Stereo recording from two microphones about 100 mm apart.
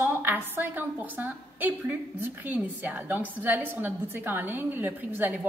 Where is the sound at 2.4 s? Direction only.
20° right (ahead or behind).